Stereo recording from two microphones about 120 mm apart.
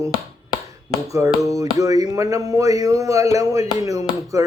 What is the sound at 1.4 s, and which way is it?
Speech, 25° right (ahead or behind).